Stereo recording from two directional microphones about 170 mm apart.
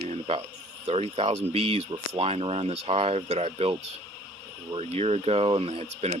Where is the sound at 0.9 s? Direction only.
35° right (ahead or behind).